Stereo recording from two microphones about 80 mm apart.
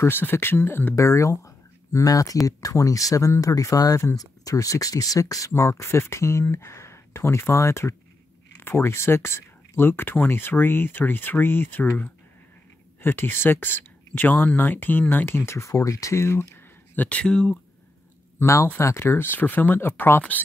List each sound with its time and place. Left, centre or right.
0.0 s speech: left
0.9 s a sound: left
2.0 s speech: left
13.0 s speech: left; by 17.6 s centre
18.4 s speech: left